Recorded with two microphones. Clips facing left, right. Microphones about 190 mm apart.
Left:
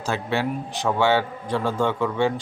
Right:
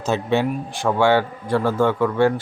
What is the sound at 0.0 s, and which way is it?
A man's voice, 20° right (ahead or behind).